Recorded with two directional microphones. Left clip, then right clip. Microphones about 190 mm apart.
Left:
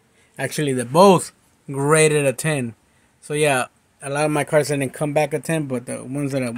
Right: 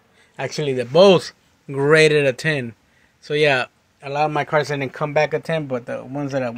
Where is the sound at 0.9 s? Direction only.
15° left (ahead or behind).